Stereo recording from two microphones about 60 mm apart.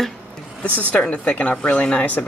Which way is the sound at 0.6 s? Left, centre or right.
Left.